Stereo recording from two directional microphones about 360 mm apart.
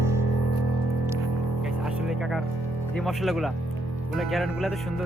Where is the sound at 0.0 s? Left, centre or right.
Centre.